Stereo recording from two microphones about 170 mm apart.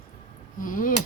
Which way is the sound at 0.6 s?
50° left (ahead or behind).